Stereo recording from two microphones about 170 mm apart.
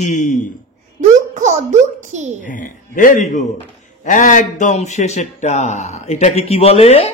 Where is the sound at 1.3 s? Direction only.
45° right (ahead or behind).